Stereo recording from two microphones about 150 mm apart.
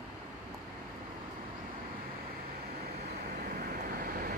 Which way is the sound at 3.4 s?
75° right (ahead or behind).